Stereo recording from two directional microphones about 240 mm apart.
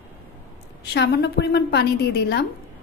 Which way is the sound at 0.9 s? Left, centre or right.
Left.